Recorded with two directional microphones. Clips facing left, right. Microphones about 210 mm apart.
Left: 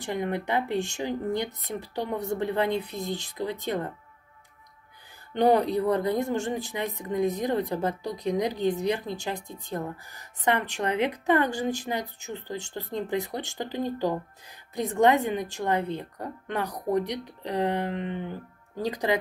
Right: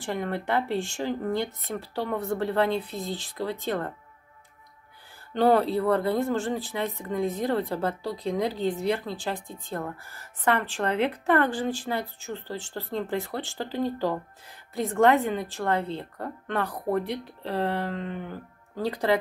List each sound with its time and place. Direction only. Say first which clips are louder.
0.1 s a woman's voice: even; 15° left (ahead or behind)
5.3 s a woman's voice: even; 15° left (ahead or behind)